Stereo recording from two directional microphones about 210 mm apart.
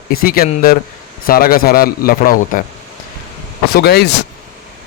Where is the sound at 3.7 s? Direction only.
50° left (ahead or behind).